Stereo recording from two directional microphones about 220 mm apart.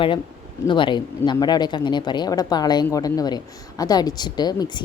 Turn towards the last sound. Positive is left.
turn(degrees=20)  # may be behind; listen again after turning